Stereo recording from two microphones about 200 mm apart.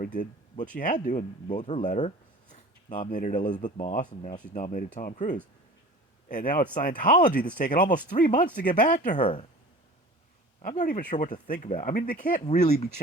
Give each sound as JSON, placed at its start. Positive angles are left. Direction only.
{"t": 0.0, "sound": "speech", "side_deg": 40}
{"t": 1.5, "sound": "speech", "side_deg": 25}
{"t": 1.8, "sound": "speech", "side_deg": 40}
{"t": 10.6, "sound": "speech", "side_deg": 40}